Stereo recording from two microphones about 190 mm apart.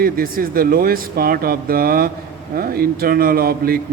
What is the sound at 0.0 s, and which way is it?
Speech, 50° right (ahead or behind).